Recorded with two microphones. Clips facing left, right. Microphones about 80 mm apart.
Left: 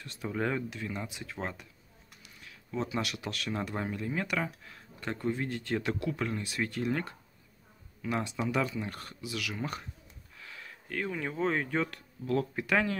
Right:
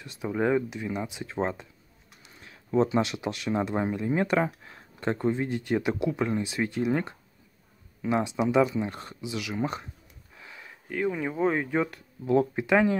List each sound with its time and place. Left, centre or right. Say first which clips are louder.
0.0 s speech: right 6 dB; centre